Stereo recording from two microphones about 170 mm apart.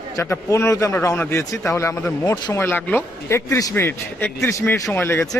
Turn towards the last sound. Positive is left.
turn(degrees=15)  # may be behind; listen again after turning